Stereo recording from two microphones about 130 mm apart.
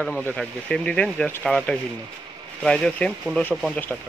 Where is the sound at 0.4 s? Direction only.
5° left (ahead or behind).